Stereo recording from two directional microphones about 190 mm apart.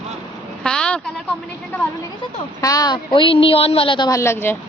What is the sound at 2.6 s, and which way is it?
A woman's voice, 20° left (ahead or behind).